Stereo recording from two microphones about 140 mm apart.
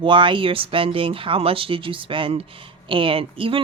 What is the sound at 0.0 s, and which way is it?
A woman's voice, 35° right (ahead or behind).